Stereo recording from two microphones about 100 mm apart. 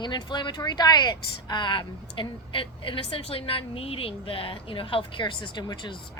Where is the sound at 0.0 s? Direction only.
50° left (ahead or behind).